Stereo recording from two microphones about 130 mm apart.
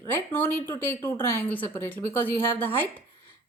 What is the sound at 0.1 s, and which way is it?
A woman's voice, 15° left (ahead or behind).